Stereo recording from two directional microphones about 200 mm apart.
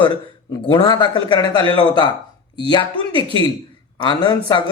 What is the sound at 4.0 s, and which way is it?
Speech, 25° left (ahead or behind).